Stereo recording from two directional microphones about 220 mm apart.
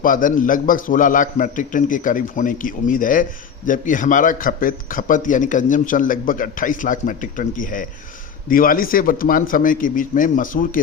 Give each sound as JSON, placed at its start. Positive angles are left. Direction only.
{"t": 0.0, "sound": "a man's voice", "side_deg": 40}